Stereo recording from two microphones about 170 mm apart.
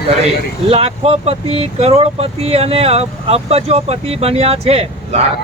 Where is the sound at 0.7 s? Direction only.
35° right (ahead or behind).